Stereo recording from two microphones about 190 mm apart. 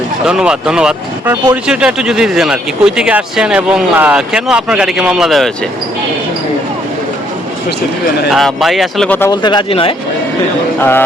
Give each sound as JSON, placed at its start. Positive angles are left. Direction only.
{"t": 0.3, "sound": "speech", "side_deg": -5}
{"t": 8.3, "sound": "speech", "side_deg": 0}
{"t": 9.3, "sound": "speech", "side_deg": 25}
{"t": 10.8, "sound": "speech", "side_deg": 10}